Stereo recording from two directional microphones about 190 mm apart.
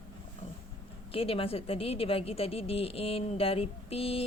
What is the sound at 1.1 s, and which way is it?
A woman's voice, 30° left (ahead or behind).